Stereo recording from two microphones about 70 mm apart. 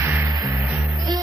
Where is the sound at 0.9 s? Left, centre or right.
Right.